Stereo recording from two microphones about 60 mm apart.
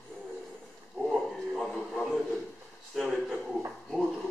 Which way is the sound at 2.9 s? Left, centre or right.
Centre.